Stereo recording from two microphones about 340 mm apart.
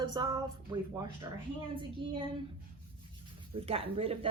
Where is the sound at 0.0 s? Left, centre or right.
Centre.